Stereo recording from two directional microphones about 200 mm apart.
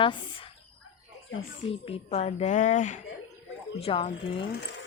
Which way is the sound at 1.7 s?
30° left (ahead or behind).